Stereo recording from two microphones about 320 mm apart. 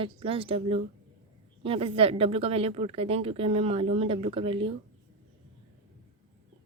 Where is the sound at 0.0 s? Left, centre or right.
Centre.